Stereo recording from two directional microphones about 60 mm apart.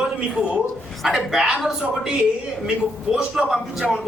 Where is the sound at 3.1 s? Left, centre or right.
Centre.